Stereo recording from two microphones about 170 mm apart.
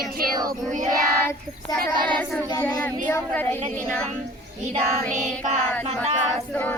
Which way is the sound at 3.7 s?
5° left (ahead or behind).